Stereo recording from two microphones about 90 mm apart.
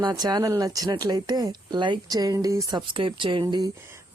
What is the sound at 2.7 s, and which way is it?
Speech, 65° right (ahead or behind).